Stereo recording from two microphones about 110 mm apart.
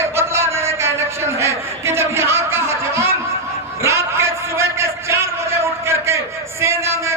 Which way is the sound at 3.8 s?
25° right (ahead or behind).